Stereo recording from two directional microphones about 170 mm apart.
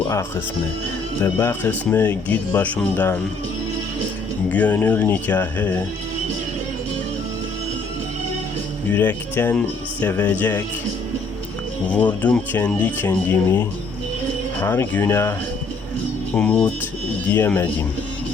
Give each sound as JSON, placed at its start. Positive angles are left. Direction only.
{"t": 0.1, "sound": "speech", "side_deg": 15}
{"t": 4.4, "sound": "speech", "side_deg": 10}
{"t": 8.9, "sound": "speech", "side_deg": 10}
{"t": 11.9, "sound": "speech", "side_deg": 10}